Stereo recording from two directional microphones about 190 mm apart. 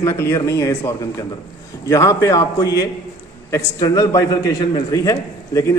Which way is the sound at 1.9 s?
15° left (ahead or behind).